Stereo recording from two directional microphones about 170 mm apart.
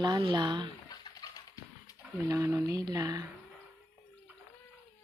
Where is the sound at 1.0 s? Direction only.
25° left (ahead or behind).